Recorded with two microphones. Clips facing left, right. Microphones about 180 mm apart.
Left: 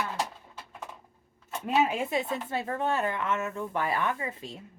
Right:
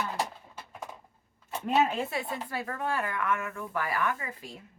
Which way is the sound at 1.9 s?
15° left (ahead or behind).